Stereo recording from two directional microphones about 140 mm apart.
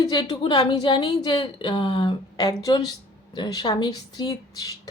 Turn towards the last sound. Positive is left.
turn(degrees=25)  # may be behind; listen again after turning